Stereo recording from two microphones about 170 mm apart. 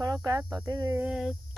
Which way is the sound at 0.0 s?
20° right (ahead or behind).